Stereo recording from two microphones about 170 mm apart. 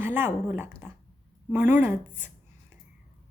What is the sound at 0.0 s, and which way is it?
Dog, 10° right (ahead or behind).